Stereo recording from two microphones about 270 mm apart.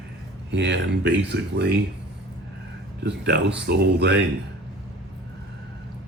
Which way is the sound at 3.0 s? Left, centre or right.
Right.